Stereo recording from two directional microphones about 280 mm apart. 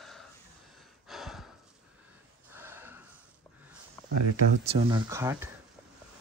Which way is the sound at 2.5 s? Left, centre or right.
Centre.